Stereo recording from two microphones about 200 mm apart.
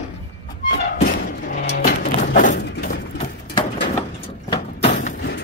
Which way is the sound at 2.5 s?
55° left (ahead or behind).